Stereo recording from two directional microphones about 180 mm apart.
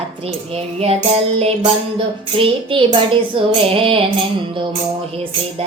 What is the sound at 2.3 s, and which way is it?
Speech, 30° right (ahead or behind).